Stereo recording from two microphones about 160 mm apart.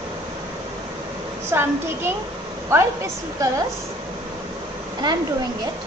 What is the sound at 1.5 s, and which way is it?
A child's voice, 15° right (ahead or behind).